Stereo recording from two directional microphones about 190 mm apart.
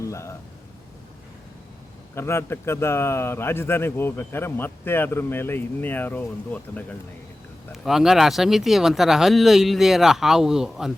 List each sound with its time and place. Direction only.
0.0 s a sound: 15° left (ahead or behind)
2.1 s speech: 15° left (ahead or behind)
7.7 s speech: centre (ahead or behind)